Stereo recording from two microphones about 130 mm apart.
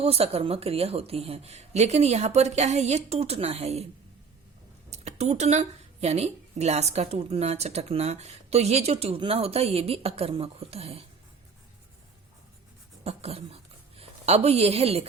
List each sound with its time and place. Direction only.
0.0 s a woman's voice: 50° right (ahead or behind)
4.9 s a woman's voice: 60° right (ahead or behind)
13.1 s speech: 50° right (ahead or behind)